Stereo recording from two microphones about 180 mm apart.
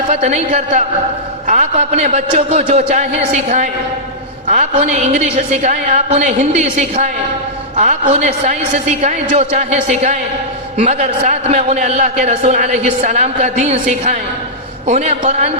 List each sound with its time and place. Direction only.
0.1 s a man's voice: 40° right (ahead or behind)